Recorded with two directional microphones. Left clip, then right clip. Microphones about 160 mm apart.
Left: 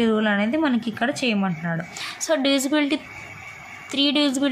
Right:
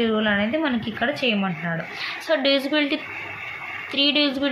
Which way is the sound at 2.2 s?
40° left (ahead or behind).